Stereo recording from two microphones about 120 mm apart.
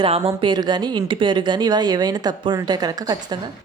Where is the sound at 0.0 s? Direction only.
50° right (ahead or behind).